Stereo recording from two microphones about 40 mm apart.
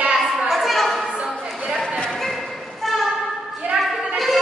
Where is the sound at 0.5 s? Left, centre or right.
Centre.